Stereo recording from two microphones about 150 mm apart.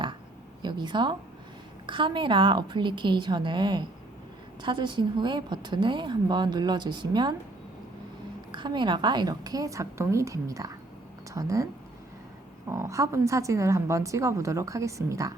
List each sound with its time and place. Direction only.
0.6 s speech: 30° right (ahead or behind)
8.5 s a woman's voice: 30° right (ahead or behind)